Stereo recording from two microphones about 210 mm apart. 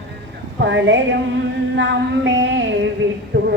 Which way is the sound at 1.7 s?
60° right (ahead or behind).